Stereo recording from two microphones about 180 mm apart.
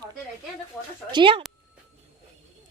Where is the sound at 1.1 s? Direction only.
25° right (ahead or behind).